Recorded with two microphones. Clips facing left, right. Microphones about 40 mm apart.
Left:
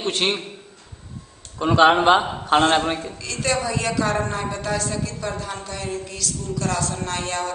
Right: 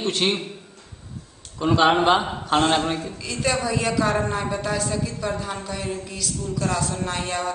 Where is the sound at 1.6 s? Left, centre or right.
Centre.